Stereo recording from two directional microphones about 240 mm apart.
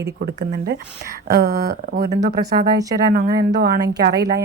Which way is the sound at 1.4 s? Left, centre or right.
Right.